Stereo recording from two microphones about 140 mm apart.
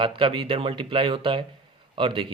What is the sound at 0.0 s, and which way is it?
Speech, 40° right (ahead or behind).